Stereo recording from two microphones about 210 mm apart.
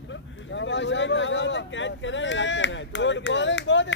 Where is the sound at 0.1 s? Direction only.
60° left (ahead or behind).